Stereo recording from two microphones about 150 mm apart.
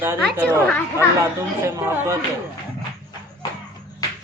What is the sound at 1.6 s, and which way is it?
Speech, 15° right (ahead or behind).